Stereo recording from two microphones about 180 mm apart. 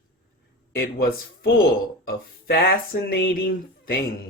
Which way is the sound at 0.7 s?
55° left (ahead or behind).